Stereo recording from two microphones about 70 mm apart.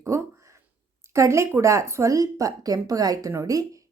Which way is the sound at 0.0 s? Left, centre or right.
Right.